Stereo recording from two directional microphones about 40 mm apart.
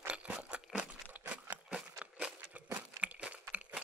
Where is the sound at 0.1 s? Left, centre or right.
Right.